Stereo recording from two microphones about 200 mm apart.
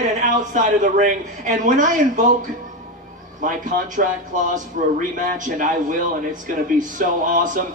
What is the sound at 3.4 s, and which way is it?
A man's voice, 40° right (ahead or behind).